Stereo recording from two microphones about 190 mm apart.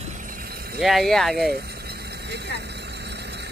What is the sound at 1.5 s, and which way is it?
Vehicle, 60° right (ahead or behind).